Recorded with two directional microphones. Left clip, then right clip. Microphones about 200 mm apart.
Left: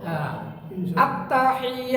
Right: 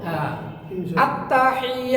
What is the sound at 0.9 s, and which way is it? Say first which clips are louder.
A woman's voice: right 2 dB; 20° left (ahead or behind).